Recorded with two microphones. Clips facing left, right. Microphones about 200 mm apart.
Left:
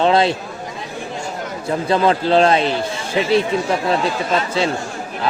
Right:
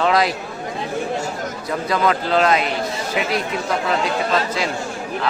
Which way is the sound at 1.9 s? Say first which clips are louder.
Left 4 dB; 30° left (ahead or behind).